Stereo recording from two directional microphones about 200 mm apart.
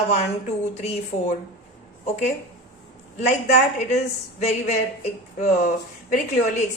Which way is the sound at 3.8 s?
35° left (ahead or behind).